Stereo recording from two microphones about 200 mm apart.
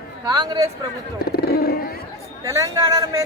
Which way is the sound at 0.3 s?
20° right (ahead or behind).